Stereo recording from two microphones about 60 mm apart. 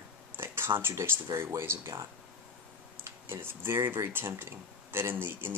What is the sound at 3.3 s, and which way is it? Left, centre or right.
Speech, right.